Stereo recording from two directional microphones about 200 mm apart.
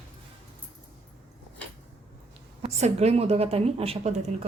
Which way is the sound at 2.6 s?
30° right (ahead or behind).